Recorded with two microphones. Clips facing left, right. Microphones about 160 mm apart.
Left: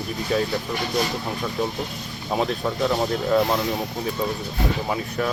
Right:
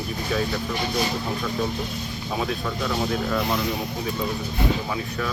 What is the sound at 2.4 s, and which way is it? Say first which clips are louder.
Speech: left 5 dB; 20° left (ahead or behind).